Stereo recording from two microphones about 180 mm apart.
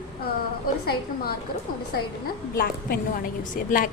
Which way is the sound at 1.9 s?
60° left (ahead or behind).